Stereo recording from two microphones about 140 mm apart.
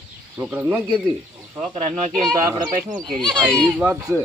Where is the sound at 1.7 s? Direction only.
55° right (ahead or behind).